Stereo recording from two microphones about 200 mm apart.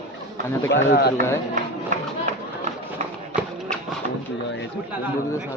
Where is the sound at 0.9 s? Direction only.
55° left (ahead or behind).